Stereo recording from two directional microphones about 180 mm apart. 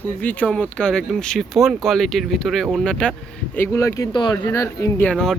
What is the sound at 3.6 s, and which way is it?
Speech, 15° left (ahead or behind).